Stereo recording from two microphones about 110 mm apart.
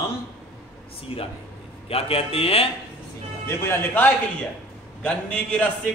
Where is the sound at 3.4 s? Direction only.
25° left (ahead or behind).